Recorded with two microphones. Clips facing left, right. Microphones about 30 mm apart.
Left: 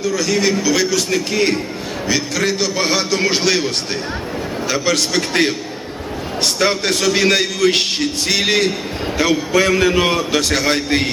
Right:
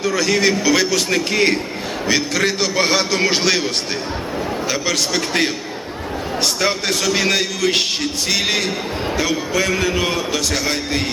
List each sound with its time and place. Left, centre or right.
0.0 s a man's voice: centre
4.7 s a man's voice: centre; by 11.1 s left